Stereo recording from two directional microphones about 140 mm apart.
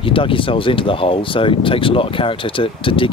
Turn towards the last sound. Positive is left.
turn(degrees=40)  # may be behind; listen again after turning